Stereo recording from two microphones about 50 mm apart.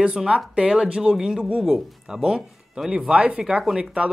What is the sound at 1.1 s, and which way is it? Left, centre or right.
Speech, centre.